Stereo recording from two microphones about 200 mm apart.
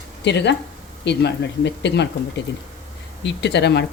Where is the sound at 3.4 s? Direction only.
60° left (ahead or behind).